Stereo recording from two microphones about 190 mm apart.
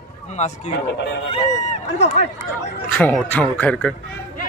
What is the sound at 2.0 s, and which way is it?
Speech, 40° left (ahead or behind).